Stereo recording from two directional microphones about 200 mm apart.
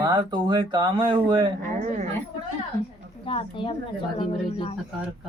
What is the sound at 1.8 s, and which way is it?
Speech, 35° right (ahead or behind).